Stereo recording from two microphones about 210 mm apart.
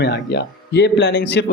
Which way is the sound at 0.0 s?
55° left (ahead or behind).